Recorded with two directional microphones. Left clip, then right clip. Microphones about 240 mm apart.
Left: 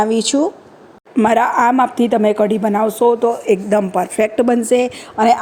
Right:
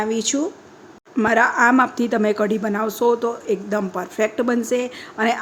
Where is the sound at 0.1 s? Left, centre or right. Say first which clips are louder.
Left 6 dB; centre.